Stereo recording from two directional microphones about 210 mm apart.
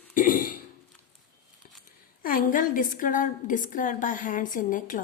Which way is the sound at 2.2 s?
40° left (ahead or behind).